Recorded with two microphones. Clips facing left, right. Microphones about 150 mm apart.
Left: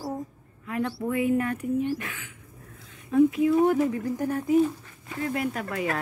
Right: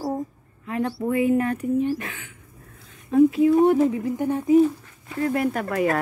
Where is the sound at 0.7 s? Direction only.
30° right (ahead or behind).